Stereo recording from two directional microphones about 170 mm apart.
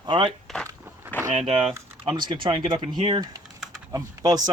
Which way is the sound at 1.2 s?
35° right (ahead or behind).